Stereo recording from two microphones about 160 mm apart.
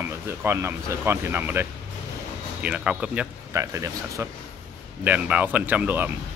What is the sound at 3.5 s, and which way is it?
Speech, 20° right (ahead or behind).